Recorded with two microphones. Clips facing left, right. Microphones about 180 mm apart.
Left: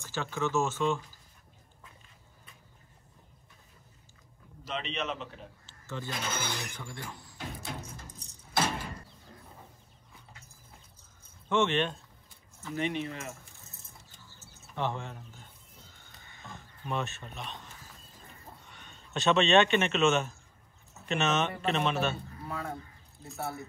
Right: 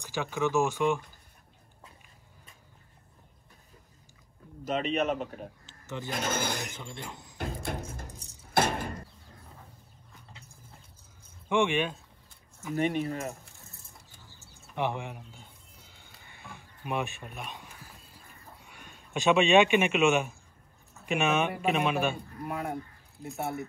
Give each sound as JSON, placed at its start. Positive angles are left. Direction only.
{"t": 0.0, "sound": "speech", "side_deg": -15}
{"t": 4.6, "sound": "a man's voice", "side_deg": -45}
{"t": 5.7, "sound": "a sound", "side_deg": -15}
{"t": 6.1, "sound": "a man's voice", "side_deg": -50}
{"t": 6.7, "sound": "speech", "side_deg": -20}
{"t": 7.3, "sound": "a sound", "side_deg": -55}
{"t": 8.5, "sound": "sliding door", "side_deg": -55}
{"t": 11.4, "sound": "speech", "side_deg": -15}
{"t": 12.7, "sound": "a man's voice", "side_deg": -45}
{"t": 14.1, "sound": "bird", "side_deg": -15}
{"t": 14.8, "sound": "a sound", "side_deg": -15}
{"t": 21.0, "sound": "speech", "side_deg": -10}